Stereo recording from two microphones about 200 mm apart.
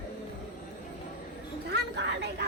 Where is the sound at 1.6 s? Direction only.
60° right (ahead or behind).